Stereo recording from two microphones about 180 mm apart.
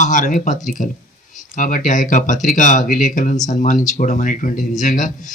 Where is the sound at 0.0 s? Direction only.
45° left (ahead or behind).